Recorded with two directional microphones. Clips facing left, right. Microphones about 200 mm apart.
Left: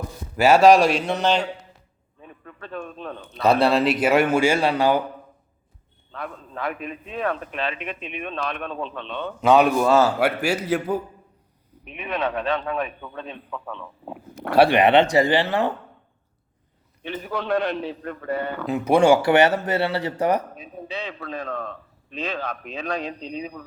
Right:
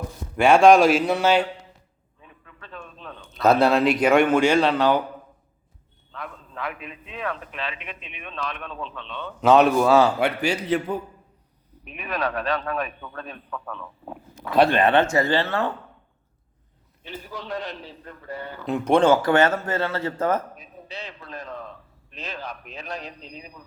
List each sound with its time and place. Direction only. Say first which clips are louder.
0.3 s a man's voice: even; 5° left (ahead or behind)
2.2 s a sound: left 7 dB; 45° left (ahead or behind)
3.4 s a man's voice: even; centre (ahead or behind)
6.1 s a man's voice: left 4 dB; 40° left (ahead or behind)
9.4 s a man's voice: right 1 dB; centre (ahead or behind)
11.9 s speech: left 2 dB; 20° left (ahead or behind)
13.1 s speech: left 2 dB; 20° left (ahead or behind)
13.8 s speech: left 2 dB; 10° left (ahead or behind)
17.0 s a man's voice: left 8 dB; 60° left (ahead or behind)
18.7 s speech: left 1 dB; 10° left (ahead or behind)
21.1 s speech: left 6 dB; 75° left (ahead or behind)
23.4 s speech: left 11 dB; 70° left (ahead or behind)